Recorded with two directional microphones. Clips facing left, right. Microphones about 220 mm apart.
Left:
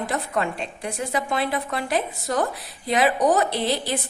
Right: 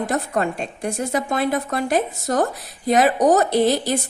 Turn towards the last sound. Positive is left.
turn(degrees=-45)  # may be behind; listen again after turning